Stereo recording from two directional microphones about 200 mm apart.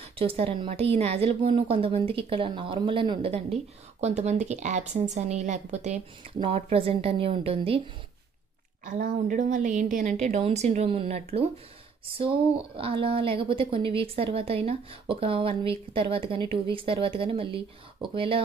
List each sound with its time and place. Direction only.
0.1 s a woman's voice: 30° right (ahead or behind)
8.8 s a woman's voice: 40° right (ahead or behind); by 18.4 s 25° right (ahead or behind)